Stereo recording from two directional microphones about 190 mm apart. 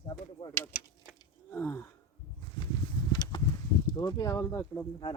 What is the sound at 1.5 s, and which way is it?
Speech, 10° left (ahead or behind).